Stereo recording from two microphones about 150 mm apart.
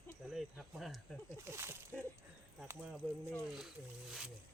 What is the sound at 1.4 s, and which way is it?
Speech, 15° right (ahead or behind).